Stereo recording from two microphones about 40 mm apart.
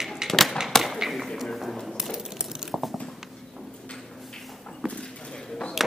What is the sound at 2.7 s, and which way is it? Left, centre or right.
Biting, centre.